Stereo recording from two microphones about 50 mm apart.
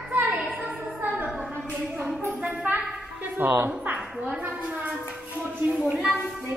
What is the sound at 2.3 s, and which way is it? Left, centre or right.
Music, right.